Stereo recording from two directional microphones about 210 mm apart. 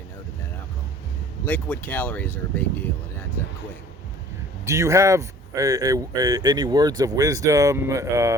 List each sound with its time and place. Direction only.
1.5 s speech: 5° left (ahead or behind)
4.6 s speech: 15° right (ahead or behind)